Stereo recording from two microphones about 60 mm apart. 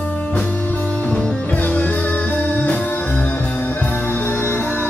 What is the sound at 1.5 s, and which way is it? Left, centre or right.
Music, left.